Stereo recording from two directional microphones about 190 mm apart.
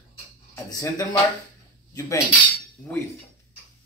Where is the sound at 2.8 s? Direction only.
10° left (ahead or behind).